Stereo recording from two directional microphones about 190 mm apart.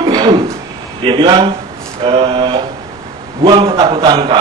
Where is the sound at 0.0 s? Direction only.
20° right (ahead or behind).